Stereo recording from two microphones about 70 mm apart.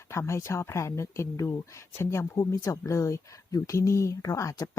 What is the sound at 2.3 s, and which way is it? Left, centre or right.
Speech, left.